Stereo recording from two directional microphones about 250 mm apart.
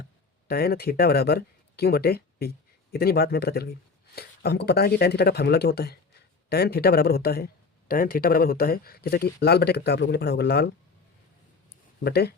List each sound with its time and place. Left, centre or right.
0.0 s speech: left
12.0 s speech: left